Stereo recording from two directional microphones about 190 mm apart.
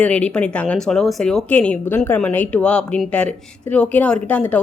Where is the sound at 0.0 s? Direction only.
5° left (ahead or behind).